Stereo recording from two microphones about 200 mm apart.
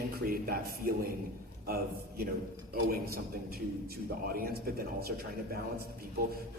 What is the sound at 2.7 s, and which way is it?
Speech, 50° right (ahead or behind).